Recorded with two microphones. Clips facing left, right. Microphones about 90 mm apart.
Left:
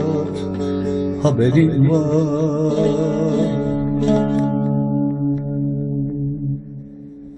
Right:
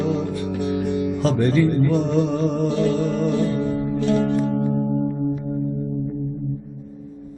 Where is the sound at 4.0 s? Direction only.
50° left (ahead or behind).